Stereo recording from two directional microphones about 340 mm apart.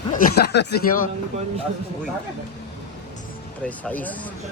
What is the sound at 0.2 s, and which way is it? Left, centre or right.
Speech, left.